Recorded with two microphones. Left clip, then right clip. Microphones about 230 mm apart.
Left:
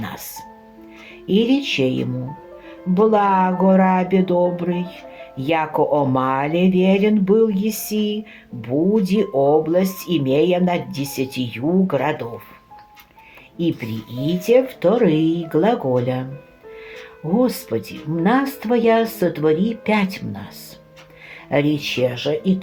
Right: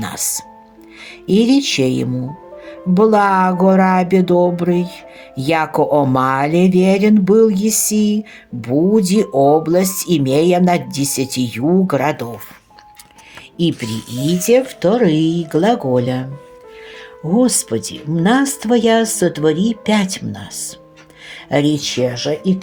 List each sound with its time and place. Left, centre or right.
0.0 s speech: right
14.2 s speech: right
14.4 s speech: right
17.2 s speech: right